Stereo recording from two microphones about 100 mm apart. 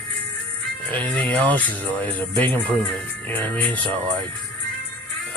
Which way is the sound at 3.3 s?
20° left (ahead or behind).